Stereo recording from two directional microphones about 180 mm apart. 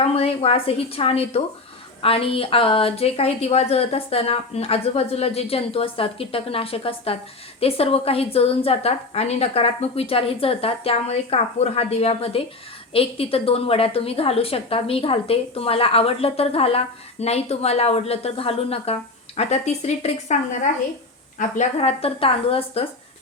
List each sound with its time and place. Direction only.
0.0 s a woman's voice: 35° left (ahead or behind)
21.3 s a woman's voice: 45° left (ahead or behind)